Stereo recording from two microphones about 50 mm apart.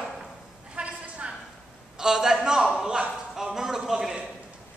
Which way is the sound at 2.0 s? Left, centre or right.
Centre.